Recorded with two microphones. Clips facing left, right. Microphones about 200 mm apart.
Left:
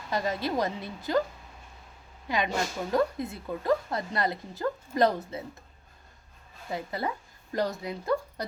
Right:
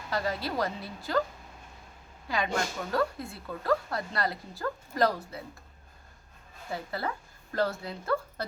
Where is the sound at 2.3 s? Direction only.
20° left (ahead or behind).